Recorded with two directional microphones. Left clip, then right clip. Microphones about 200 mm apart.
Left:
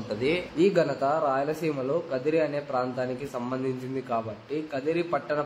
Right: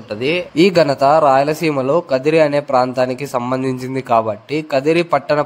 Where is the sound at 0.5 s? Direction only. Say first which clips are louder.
Right 12 dB; 50° right (ahead or behind).